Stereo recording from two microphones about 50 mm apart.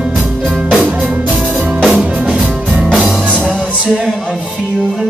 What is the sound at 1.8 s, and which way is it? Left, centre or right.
Music, centre.